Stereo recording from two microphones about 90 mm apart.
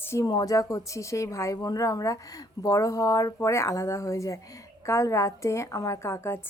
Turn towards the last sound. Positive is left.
turn(degrees=30)  # may be behind; listen again after turning